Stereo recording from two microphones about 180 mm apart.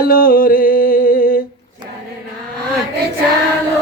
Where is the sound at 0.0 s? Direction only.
55° left (ahead or behind).